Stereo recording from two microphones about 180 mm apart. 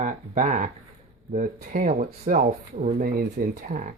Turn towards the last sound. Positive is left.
turn(degrees=-50)  # may be behind; listen again after turning